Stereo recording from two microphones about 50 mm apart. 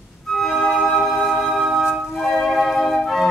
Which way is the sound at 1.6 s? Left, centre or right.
Centre.